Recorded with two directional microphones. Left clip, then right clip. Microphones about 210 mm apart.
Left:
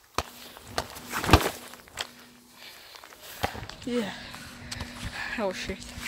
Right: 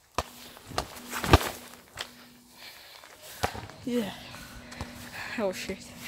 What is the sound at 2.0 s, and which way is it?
Walk, 55° left (ahead or behind).